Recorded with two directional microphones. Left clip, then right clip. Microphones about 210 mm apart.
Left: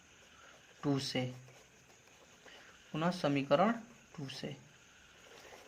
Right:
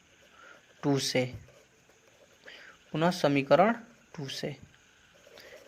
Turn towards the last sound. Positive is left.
turn(degrees=-35)  # may be behind; listen again after turning